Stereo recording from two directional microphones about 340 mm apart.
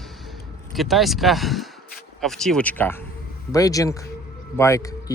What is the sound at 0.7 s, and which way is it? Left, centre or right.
Speech, centre.